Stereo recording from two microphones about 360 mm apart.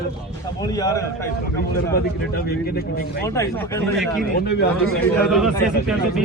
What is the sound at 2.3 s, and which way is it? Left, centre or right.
Speech, left.